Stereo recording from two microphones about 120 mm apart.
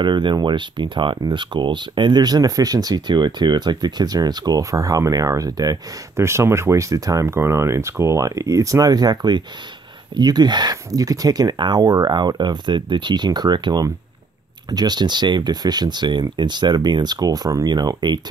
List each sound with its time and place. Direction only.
0.0 s speech: 40° right (ahead or behind)